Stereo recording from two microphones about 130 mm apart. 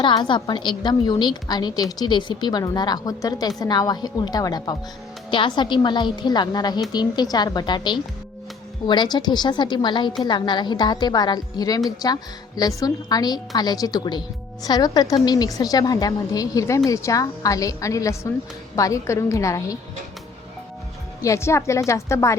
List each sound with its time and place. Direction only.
0.0 s a woman's voice: 40° left (ahead or behind)
21.2 s a woman's voice: 25° left (ahead or behind)